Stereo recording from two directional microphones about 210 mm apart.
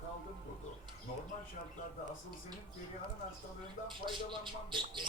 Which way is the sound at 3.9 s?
25° right (ahead or behind).